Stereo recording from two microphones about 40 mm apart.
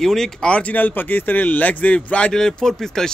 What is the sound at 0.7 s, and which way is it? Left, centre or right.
Speech, left.